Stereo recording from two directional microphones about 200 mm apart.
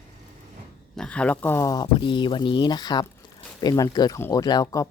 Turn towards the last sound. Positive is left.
turn(degrees=15)  # may be behind; listen again after turning